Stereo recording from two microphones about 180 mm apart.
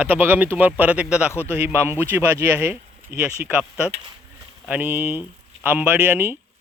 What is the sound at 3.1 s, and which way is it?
Speech, 55° right (ahead or behind).